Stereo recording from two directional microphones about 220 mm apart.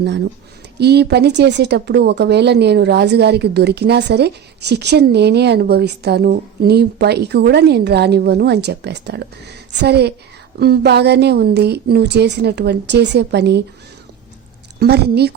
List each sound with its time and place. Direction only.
0.8 s speech: 50° right (ahead or behind)
14.8 s speech: 45° right (ahead or behind)